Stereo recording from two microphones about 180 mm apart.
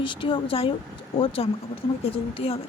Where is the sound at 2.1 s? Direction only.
30° left (ahead or behind).